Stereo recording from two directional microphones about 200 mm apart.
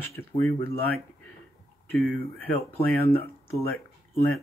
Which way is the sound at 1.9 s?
10° left (ahead or behind).